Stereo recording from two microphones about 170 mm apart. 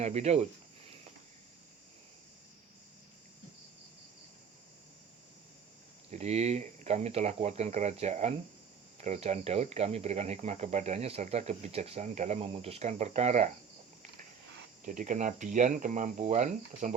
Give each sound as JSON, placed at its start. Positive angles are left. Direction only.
{"t": 0.0, "sound": "speech", "side_deg": -40}
{"t": 6.1, "sound": "speech", "side_deg": -40}
{"t": 14.8, "sound": "speech", "side_deg": -50}